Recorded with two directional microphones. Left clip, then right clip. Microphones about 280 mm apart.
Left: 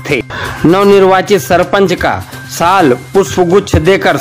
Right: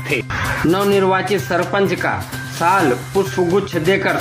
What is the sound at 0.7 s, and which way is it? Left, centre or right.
Speech, left.